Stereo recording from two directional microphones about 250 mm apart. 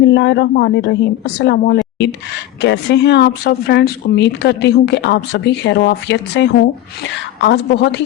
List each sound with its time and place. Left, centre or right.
0.0 s speech: left